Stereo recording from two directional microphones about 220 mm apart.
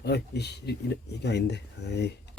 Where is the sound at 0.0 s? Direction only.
50° left (ahead or behind).